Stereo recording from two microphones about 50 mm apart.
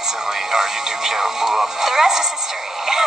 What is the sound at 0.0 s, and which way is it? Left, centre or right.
Speech, centre.